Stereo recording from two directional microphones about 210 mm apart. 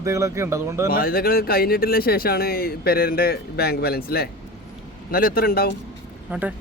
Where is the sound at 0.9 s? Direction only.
45° left (ahead or behind).